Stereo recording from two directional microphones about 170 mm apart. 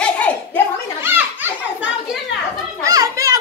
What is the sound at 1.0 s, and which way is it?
Children playing, 10° right (ahead or behind).